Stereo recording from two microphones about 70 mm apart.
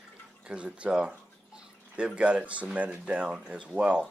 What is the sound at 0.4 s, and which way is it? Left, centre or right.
Speech, centre.